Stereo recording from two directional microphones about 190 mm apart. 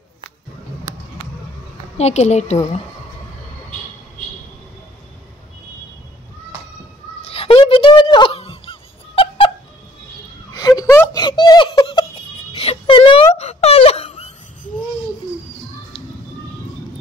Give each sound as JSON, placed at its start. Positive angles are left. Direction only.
{"t": 2.0, "sound": "a woman's voice", "side_deg": 35}
{"t": 7.2, "sound": "fowl", "side_deg": 30}
{"t": 10.5, "sound": "giggle", "side_deg": 20}